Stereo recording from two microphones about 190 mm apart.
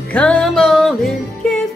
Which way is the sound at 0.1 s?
5° left (ahead or behind).